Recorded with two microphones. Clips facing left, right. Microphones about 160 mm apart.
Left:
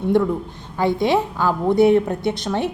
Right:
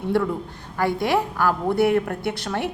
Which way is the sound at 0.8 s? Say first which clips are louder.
Left 3 dB; 20° left (ahead or behind).